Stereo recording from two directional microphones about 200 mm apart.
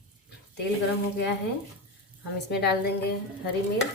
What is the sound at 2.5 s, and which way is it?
Speech, 55° left (ahead or behind).